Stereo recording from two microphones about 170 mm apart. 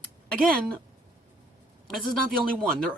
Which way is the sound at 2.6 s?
5° left (ahead or behind).